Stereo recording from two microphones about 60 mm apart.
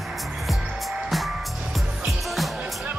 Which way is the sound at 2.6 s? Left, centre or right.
Right.